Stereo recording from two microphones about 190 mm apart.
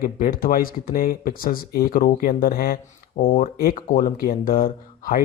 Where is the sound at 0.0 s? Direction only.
50° left (ahead or behind).